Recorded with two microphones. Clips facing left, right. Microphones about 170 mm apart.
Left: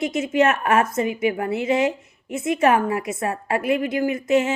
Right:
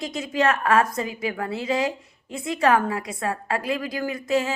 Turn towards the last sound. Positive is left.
turn(degrees=20)  # may be behind; listen again after turning